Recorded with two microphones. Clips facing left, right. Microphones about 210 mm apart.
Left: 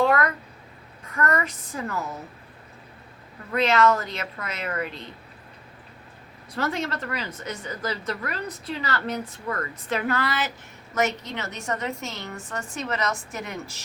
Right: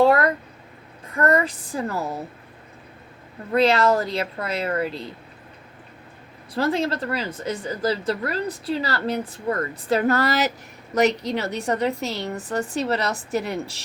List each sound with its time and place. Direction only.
0.0 s a sound: 30° right (ahead or behind)
1.1 s a woman's voice: 30° right (ahead or behind)
3.5 s a woman's voice: 35° right (ahead or behind)
6.5 s a woman's voice: 30° right (ahead or behind)